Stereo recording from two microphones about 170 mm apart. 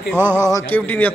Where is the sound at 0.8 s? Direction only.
10° left (ahead or behind).